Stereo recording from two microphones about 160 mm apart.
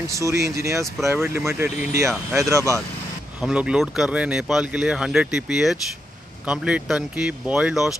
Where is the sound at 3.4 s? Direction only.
5° right (ahead or behind).